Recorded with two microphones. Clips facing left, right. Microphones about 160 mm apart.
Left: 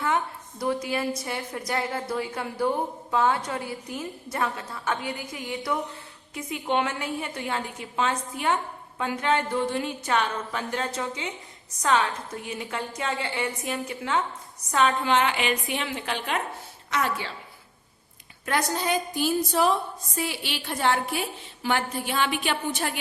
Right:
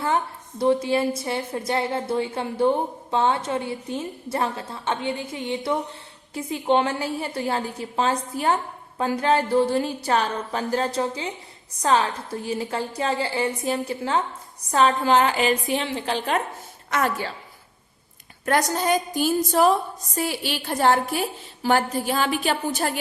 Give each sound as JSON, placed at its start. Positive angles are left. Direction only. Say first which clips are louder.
{"t": 0.6, "sound": "a woman's voice", "louder": "right 7 dB", "side_deg": -25}
{"t": 18.4, "sound": "a woman's voice", "louder": "right 5 dB", "side_deg": -45}